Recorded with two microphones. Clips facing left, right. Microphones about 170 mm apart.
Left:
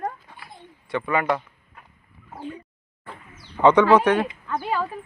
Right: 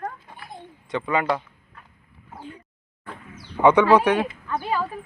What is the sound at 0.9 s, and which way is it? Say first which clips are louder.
Speech: even; 20° right (ahead or behind).